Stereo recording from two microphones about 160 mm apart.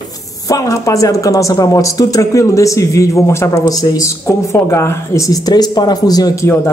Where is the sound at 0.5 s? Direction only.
20° left (ahead or behind).